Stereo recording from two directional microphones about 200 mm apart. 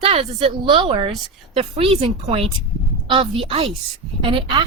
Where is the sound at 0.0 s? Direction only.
30° right (ahead or behind).